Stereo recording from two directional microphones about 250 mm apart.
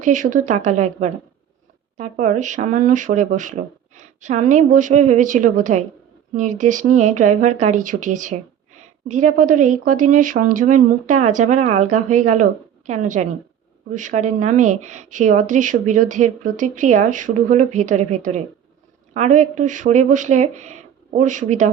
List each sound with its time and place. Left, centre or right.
0.0 s speech: right